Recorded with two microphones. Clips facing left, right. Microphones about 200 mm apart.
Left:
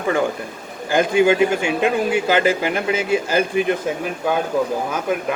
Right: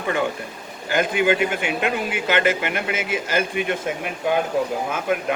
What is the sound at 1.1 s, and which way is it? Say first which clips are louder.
Speech: left 6 dB; 30° left (ahead or behind).